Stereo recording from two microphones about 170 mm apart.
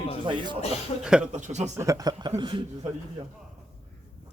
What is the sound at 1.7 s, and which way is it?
Speech, 20° right (ahead or behind).